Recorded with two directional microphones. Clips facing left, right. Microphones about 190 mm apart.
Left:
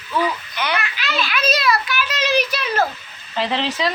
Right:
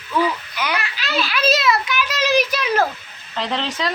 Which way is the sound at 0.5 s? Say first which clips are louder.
Left 1 dB; 5° right (ahead or behind).